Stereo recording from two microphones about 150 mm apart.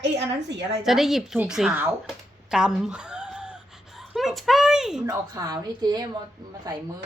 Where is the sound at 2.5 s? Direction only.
5° right (ahead or behind).